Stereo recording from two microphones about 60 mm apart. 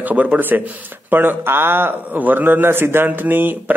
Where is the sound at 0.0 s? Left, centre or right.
Right.